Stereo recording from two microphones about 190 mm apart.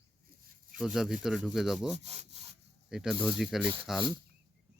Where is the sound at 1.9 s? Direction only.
35° right (ahead or behind).